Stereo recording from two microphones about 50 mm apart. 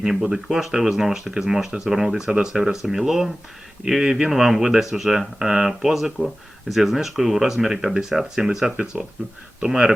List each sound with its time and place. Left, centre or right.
0.0 s speech: centre